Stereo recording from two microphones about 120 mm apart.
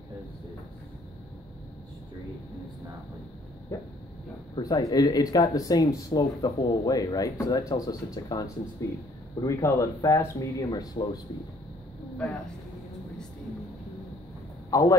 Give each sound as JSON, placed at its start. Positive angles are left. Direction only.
{"t": 3.7, "sound": "speech", "side_deg": 25}
{"t": 14.7, "sound": "speech", "side_deg": 30}